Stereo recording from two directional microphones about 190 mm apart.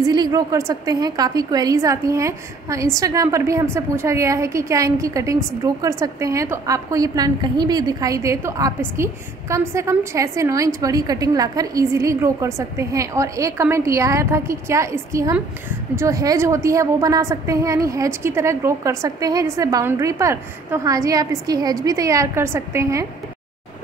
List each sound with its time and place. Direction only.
0.0 s a woman's voice: 20° right (ahead or behind)